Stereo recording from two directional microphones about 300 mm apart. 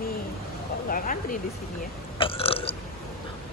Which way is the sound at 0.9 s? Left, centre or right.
Left.